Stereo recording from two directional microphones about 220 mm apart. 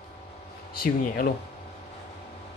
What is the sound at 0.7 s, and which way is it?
Speech, 45° left (ahead or behind).